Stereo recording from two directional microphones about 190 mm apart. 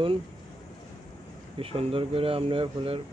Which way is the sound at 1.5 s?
30° right (ahead or behind).